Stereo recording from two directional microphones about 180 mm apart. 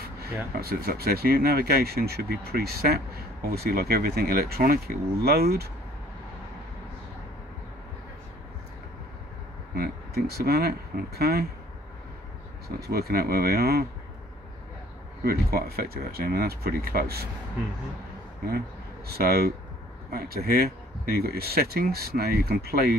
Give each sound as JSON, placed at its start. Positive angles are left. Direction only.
{"t": 0.6, "sound": "speech", "side_deg": -60}
{"t": 9.8, "sound": "speech", "side_deg": -60}
{"t": 12.6, "sound": "speech", "side_deg": -60}
{"t": 15.2, "sound": "speech", "side_deg": -60}
{"t": 19.0, "sound": "speech", "side_deg": -60}